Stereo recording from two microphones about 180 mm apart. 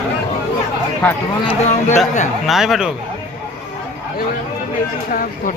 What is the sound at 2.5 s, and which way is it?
Speech, centre (ahead or behind).